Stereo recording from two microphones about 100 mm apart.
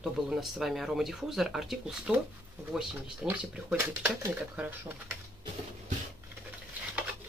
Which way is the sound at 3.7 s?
25° right (ahead or behind).